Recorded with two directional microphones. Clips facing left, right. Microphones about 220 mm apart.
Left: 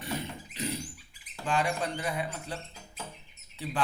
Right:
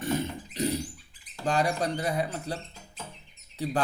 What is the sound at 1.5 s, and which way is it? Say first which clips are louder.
Speech: right 3 dB; 40° right (ahead or behind).